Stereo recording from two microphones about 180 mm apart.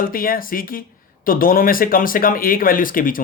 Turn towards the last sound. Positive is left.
turn(degrees=50)  # may be behind; listen again after turning